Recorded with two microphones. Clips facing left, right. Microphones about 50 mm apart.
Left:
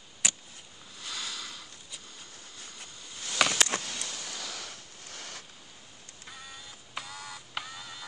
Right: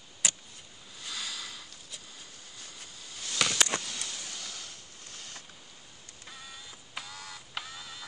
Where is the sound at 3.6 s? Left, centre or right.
Left.